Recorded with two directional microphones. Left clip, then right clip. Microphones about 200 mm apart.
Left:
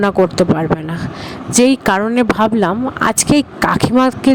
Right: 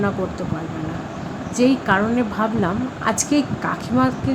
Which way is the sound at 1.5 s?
55° left (ahead or behind).